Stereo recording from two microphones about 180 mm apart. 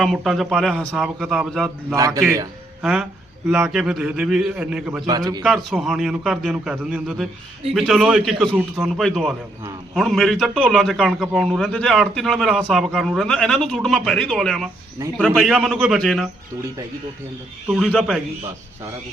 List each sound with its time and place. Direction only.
0.0 s a man's voice: centre (ahead or behind)
2.0 s speech: 20° right (ahead or behind)
2.8 s a man's voice: centre (ahead or behind)
5.0 s a man's voice: 20° right (ahead or behind)
5.4 s a man's voice: centre (ahead or behind)
15.0 s speech: 15° right (ahead or behind)
15.4 s a man's voice: centre (ahead or behind)
17.7 s a man's voice: centre (ahead or behind)